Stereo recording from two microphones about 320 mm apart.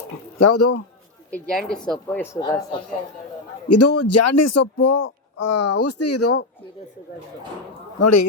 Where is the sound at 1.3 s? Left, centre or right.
Centre.